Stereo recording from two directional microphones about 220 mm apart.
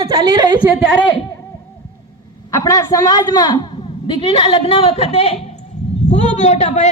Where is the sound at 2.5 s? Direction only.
15° left (ahead or behind).